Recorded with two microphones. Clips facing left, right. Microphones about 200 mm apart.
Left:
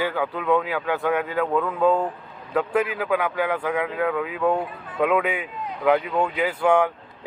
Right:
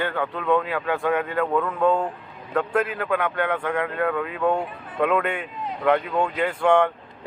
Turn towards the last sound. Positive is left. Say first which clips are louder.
# even
turn(degrees=5)  # may be behind; listen again after turning